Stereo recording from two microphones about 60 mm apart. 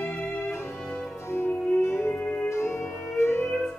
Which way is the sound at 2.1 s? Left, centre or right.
Left.